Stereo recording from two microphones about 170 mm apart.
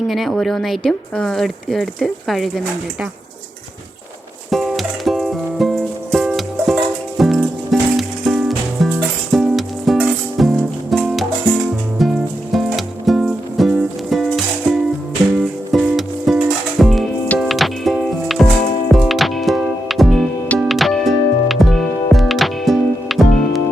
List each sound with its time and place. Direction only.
0.1 s speech: centre (ahead or behind)
4.5 s music: centre (ahead or behind)